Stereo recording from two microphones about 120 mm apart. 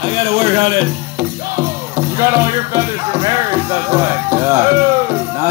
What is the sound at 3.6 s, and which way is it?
Speech, 25° right (ahead or behind).